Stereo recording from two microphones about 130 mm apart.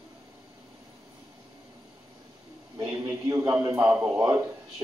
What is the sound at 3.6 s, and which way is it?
Speech, 25° right (ahead or behind).